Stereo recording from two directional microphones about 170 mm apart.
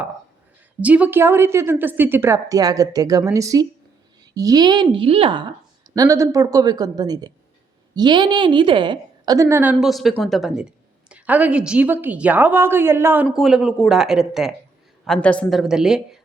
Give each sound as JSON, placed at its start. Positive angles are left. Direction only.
{"t": 0.8, "sound": "a woman's voice", "side_deg": -10}
{"t": 5.9, "sound": "a woman's voice", "side_deg": -20}
{"t": 9.8, "sound": "a woman's voice", "side_deg": 0}
{"t": 13.2, "sound": "speech", "side_deg": 0}